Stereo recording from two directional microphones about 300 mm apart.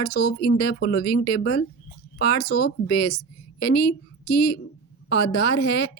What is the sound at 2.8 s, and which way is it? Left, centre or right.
A woman's voice, left.